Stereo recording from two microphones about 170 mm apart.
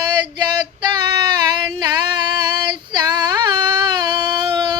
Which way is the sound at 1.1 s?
25° right (ahead or behind).